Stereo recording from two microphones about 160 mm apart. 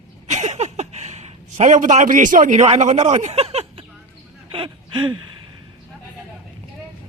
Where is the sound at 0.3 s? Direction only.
45° right (ahead or behind).